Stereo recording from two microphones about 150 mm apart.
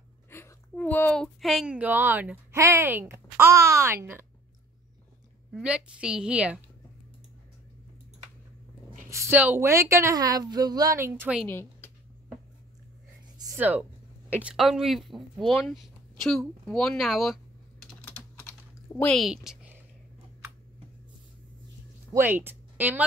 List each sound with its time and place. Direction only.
0.3 s a woman's voice: 15° left (ahead or behind); by 4.3 s 15° right (ahead or behind)
5.5 s a woman's voice: 5° right (ahead or behind)
9.1 s a woman's voice: 10° right (ahead or behind)
11.4 s speech: 15° left (ahead or behind)
13.6 s a woman's voice: 10° right (ahead or behind)
18.0 s typing: 10° left (ahead or behind)
18.9 s speech: 5° left (ahead or behind)
22.1 s a woman's voice: 15° right (ahead or behind)